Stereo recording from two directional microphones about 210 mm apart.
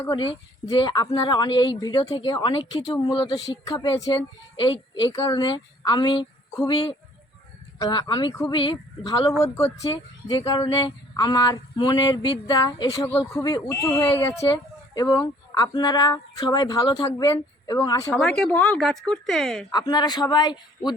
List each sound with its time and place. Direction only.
0.0 s a woman's voice: 20° left (ahead or behind)
18.1 s speech: 5° left (ahead or behind)
19.7 s speech: 20° left (ahead or behind)